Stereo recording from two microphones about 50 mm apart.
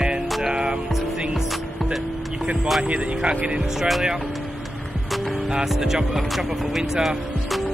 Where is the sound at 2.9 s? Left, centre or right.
Right.